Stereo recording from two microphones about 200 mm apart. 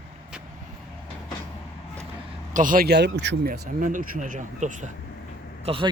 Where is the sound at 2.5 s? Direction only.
40° right (ahead or behind); by 3.5 s 60° right (ahead or behind).